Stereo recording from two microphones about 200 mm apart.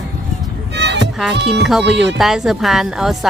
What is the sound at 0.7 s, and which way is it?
Music, 60° right (ahead or behind).